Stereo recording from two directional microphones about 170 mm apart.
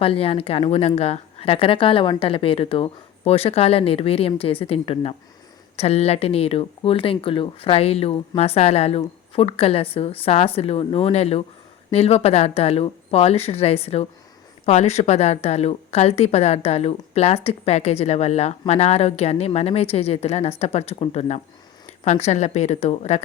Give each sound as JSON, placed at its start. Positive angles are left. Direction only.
{"t": 0.0, "sound": "a woman's voice", "side_deg": 35}